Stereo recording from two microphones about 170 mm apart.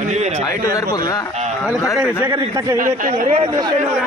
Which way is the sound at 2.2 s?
25° right (ahead or behind).